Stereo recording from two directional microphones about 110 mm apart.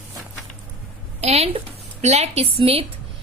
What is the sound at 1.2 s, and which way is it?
Speech, 70° right (ahead or behind).